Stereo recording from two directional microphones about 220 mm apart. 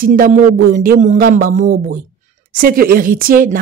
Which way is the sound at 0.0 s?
40° right (ahead or behind).